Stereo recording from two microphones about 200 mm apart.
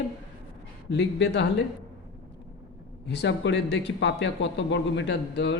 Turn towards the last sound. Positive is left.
turn(degrees=60)  # may be behind; listen again after turning